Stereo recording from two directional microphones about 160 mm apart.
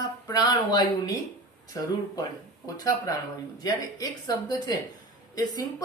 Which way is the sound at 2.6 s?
20° left (ahead or behind).